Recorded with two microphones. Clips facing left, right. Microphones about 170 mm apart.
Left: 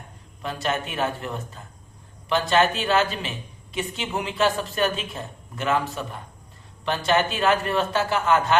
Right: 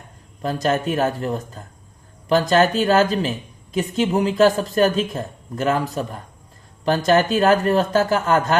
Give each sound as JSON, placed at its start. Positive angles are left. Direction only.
{"t": 0.4, "sound": "a woman's voice", "side_deg": -40}